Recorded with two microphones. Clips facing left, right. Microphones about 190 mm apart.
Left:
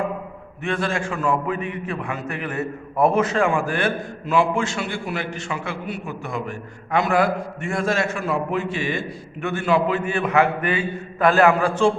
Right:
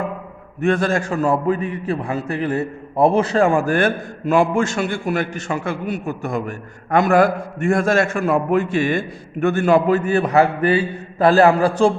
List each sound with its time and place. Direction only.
0.6 s a man's voice: 45° right (ahead or behind)